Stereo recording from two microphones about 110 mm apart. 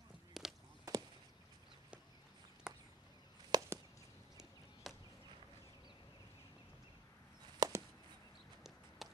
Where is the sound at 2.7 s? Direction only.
5° right (ahead or behind).